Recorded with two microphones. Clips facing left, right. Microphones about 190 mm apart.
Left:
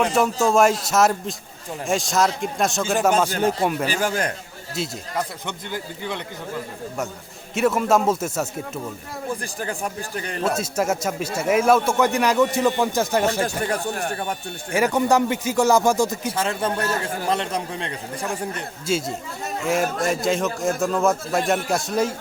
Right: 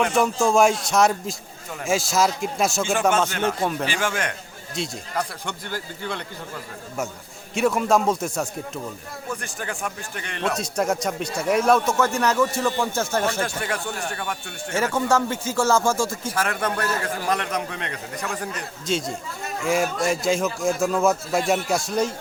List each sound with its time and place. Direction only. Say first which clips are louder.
0.1 s speech: left 1 dB; centre (ahead or behind)
3.2 s a man's voice: left 3 dB; 35° left (ahead or behind)
3.6 s speech: left 2 dB; 10° left (ahead or behind)
3.8 s a man's voice: left 2 dB; 40° left (ahead or behind)
5.1 s a man's voice: even; 20° left (ahead or behind)
7.5 s speech: left 1 dB; centre (ahead or behind)
9.3 s a man's voice: left 2 dB; 35° left (ahead or behind)
10.6 s speech: left 1 dB; 5° left (ahead or behind)
13.4 s a man's voice: left 3 dB; 40° left (ahead or behind)
14.7 s a man's voice: left 3 dB; 15° left (ahead or behind)
18.9 s speech: left 2 dB; 5° left (ahead or behind)